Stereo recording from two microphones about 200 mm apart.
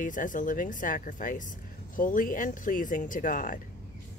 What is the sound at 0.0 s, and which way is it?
Speech, 40° left (ahead or behind).